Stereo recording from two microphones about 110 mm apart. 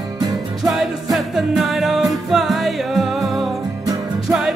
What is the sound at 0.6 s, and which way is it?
Music, centre (ahead or behind).